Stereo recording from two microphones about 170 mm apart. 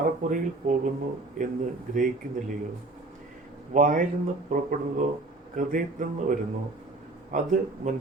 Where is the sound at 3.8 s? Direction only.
50° right (ahead or behind).